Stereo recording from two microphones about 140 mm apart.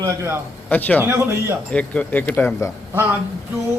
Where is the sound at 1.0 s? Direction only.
15° right (ahead or behind).